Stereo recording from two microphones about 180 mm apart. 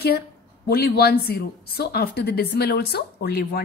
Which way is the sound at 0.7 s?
60° left (ahead or behind).